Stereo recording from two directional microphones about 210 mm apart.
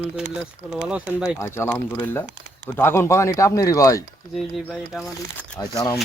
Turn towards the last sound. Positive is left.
turn(degrees=15)  # may be behind; listen again after turning